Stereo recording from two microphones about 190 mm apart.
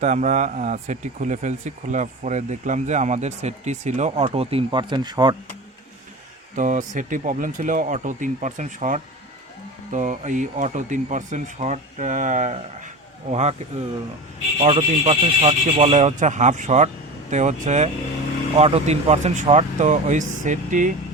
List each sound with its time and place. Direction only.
0.0 s speech: 40° right (ahead or behind); by 5.4 s 20° right (ahead or behind)
6.6 s speech: 40° right (ahead or behind)
14.6 s speech: 35° right (ahead or behind)